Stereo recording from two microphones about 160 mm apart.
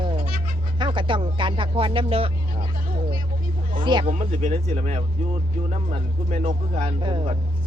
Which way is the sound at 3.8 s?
30° right (ahead or behind).